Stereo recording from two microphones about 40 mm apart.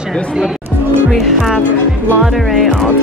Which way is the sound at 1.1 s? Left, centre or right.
Centre.